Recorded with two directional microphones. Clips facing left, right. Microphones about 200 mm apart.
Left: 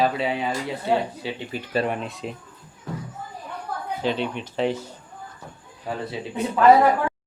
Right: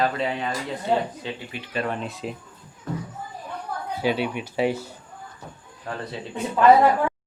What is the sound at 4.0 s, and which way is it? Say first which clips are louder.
Speech: right 2 dB; 10° right (ahead or behind).